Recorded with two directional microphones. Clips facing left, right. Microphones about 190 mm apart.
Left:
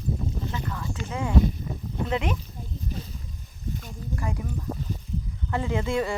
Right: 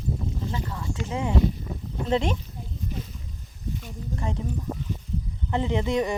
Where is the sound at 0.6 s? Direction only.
25° right (ahead or behind).